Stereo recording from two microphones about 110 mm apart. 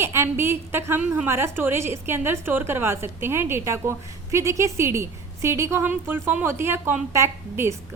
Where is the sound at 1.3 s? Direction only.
20° right (ahead or behind).